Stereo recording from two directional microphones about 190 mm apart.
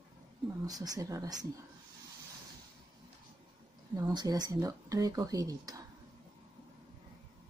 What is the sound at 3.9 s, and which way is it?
Speech, 20° right (ahead or behind).